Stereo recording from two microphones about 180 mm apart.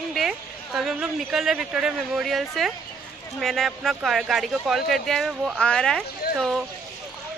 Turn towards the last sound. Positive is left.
turn(degrees=0)  # may be behind; listen again after turning